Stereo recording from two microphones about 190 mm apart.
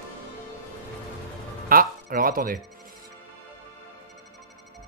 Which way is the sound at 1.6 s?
50° right (ahead or behind).